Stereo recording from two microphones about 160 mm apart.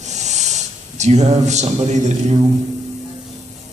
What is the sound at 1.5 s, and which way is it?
Speech, 45° right (ahead or behind).